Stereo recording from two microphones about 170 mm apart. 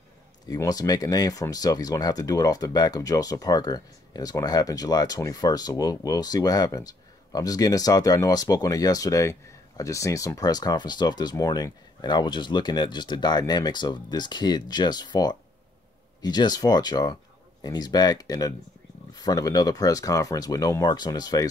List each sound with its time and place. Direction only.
0.5 s speech: 20° left (ahead or behind)